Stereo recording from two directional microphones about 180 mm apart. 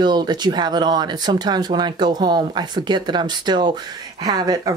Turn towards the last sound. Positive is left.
turn(degrees=-20)  # may be behind; listen again after turning